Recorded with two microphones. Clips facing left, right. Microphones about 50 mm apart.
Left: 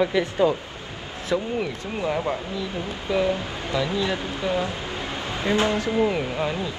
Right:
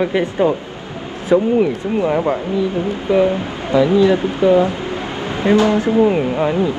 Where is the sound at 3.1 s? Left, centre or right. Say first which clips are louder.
Right 8 dB; right.